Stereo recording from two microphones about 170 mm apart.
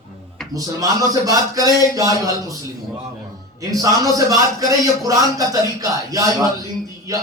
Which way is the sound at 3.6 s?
20° right (ahead or behind).